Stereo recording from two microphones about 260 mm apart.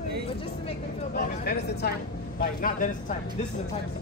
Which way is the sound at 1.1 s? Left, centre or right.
Left.